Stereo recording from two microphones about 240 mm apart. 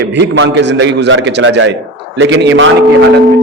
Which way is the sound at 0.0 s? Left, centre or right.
Right.